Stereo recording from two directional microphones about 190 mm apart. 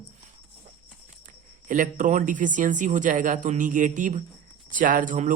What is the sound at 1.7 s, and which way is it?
Speech, 45° right (ahead or behind).